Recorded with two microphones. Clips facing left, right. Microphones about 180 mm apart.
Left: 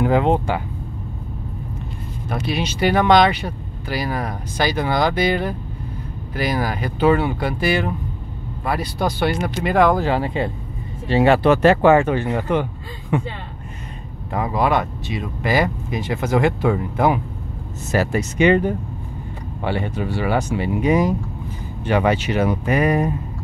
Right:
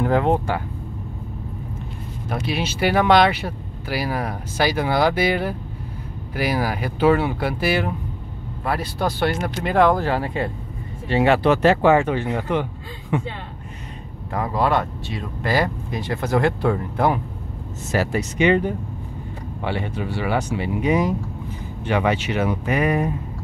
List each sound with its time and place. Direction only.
0.0 s speech: 15° left (ahead or behind)
2.2 s speech: 5° right (ahead or behind)
8.9 s speech: 15° left (ahead or behind)
10.1 s speech: 25° left (ahead or behind)
11.1 s speech: 35° left (ahead or behind)
11.4 s speech: 55° left (ahead or behind)
14.3 s speech: 15° left (ahead or behind)
17.9 s speech: 50° left (ahead or behind)
19.6 s speech: 45° left (ahead or behind)